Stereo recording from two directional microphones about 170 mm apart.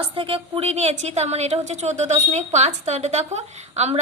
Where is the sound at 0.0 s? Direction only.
30° right (ahead or behind).